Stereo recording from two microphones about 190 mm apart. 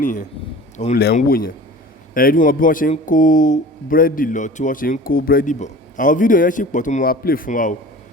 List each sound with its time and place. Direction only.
0.0 s a man's voice: 40° left (ahead or behind)
1.1 s speech: 50° left (ahead or behind)